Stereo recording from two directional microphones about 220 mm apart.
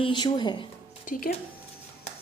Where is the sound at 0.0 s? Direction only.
20° left (ahead or behind).